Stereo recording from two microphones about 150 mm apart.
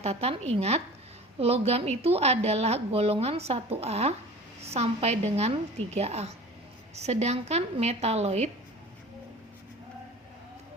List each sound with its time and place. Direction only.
0.0 s a woman's voice: 45° right (ahead or behind)